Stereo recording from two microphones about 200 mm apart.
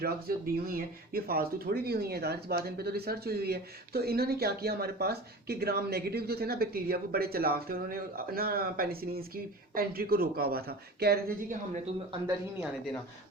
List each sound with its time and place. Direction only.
0.0 s speech: 50° right (ahead or behind)